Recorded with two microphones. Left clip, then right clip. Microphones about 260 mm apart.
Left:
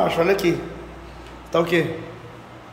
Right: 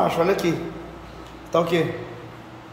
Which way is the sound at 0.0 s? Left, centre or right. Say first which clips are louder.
Left 1 dB; centre.